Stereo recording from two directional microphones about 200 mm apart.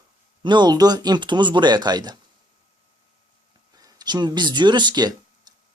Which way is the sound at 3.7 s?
20° right (ahead or behind).